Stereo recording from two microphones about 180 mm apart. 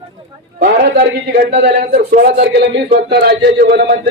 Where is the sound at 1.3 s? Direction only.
60° right (ahead or behind).